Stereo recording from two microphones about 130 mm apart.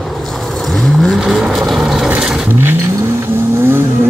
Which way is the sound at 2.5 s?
15° right (ahead or behind).